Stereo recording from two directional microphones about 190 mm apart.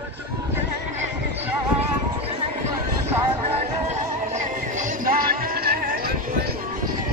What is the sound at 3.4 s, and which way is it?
Music, 35° right (ahead or behind).